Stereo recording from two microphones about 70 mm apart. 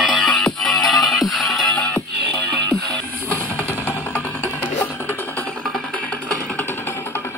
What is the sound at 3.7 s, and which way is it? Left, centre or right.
Music, left.